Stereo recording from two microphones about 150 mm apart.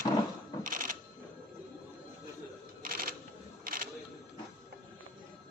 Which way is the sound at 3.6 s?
70° right (ahead or behind).